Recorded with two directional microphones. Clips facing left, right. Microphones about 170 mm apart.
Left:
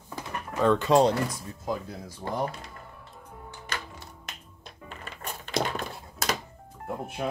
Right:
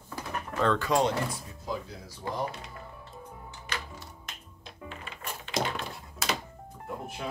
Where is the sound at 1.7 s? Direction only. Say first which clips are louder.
Left 3 dB; 50° left (ahead or behind).